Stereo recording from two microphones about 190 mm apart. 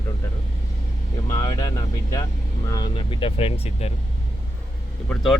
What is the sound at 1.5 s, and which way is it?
Speech, 20° left (ahead or behind).